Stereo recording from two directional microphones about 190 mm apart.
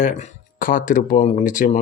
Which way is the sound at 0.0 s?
40° left (ahead or behind).